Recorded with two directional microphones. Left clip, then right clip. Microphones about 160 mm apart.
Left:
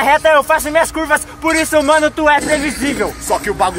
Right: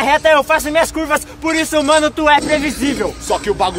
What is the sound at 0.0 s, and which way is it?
A man's voice, centre (ahead or behind).